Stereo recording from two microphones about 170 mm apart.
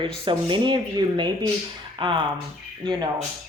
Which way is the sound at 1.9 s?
30° right (ahead or behind).